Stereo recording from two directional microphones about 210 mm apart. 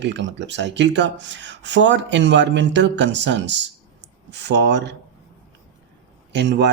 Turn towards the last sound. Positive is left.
turn(degrees=-55)  # may be behind; listen again after turning